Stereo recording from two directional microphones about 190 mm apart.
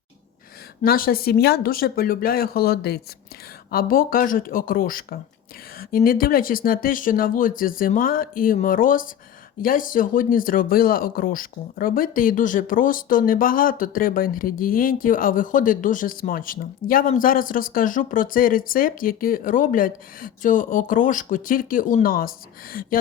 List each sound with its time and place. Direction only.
0.8 s speech: 50° left (ahead or behind)